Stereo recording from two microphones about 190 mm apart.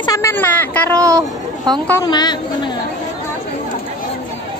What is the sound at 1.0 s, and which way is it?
Speech, 20° right (ahead or behind).